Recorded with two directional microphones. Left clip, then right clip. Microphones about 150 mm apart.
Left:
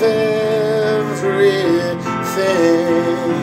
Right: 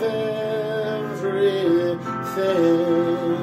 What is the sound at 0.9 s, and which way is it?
Music, 35° left (ahead or behind).